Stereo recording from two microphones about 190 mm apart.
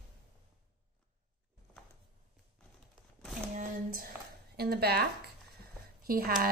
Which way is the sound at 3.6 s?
50° right (ahead or behind).